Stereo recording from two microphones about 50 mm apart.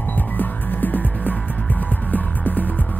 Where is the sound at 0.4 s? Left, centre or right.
Left.